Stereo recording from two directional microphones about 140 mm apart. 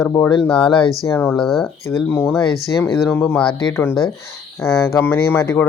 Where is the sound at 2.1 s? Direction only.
15° left (ahead or behind).